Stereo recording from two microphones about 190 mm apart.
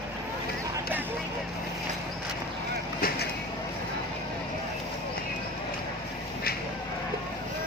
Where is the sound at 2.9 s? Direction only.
50° left (ahead or behind).